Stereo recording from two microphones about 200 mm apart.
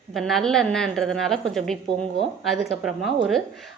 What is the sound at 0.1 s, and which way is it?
Speech, centre (ahead or behind).